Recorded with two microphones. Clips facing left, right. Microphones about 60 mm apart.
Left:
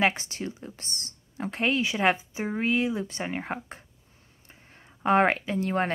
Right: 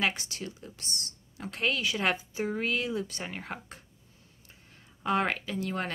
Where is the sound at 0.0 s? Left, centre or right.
Left.